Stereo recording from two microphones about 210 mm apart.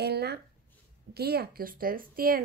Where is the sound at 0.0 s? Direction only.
50° right (ahead or behind).